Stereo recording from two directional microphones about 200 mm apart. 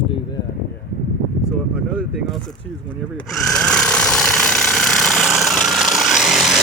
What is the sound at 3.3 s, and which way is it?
Jackhammer, 5° left (ahead or behind).